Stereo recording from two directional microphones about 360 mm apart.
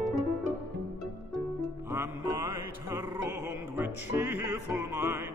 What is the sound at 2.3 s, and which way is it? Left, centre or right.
Music, left.